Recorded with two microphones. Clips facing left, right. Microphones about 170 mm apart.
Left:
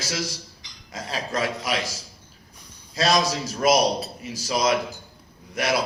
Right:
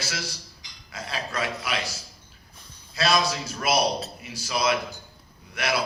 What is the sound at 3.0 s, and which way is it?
A man's voice, 40° left (ahead or behind).